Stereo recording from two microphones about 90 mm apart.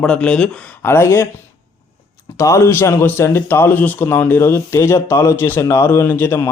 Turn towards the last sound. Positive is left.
turn(degrees=25)  # may be behind; listen again after turning